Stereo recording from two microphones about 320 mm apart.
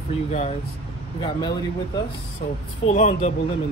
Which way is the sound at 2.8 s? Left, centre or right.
Left.